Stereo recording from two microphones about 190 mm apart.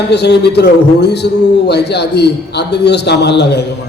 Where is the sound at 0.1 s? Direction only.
60° left (ahead or behind).